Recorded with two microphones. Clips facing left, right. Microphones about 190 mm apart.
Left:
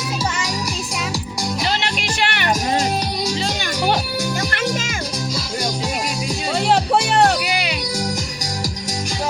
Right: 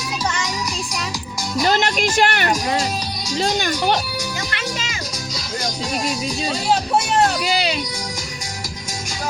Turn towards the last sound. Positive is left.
turn(degrees=-30)  # may be behind; listen again after turning